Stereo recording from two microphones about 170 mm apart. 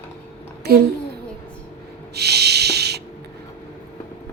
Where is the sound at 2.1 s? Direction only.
75° right (ahead or behind).